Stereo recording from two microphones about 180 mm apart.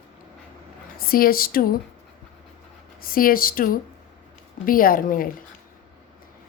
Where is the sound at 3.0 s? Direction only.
55° left (ahead or behind).